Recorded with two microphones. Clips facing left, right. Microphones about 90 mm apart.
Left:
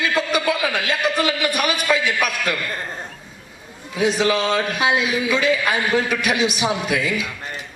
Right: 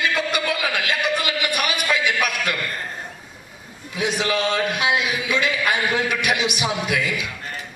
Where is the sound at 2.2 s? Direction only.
35° left (ahead or behind).